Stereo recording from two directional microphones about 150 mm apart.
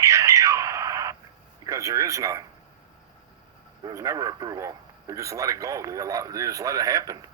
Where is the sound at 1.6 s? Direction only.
20° right (ahead or behind).